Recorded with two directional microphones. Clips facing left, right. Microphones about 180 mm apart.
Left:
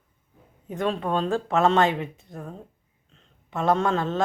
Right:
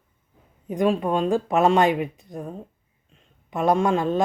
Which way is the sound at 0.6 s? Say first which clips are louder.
Right 5 dB; 15° right (ahead or behind).